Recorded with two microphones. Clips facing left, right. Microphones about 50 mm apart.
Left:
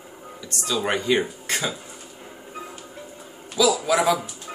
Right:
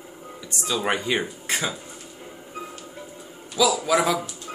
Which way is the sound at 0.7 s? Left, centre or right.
Centre.